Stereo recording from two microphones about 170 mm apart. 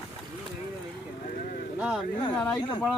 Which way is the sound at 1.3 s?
60° left (ahead or behind).